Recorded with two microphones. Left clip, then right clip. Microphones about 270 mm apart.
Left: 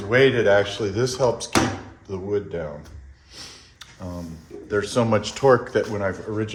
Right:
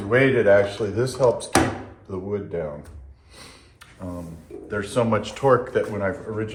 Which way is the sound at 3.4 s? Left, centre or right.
Left.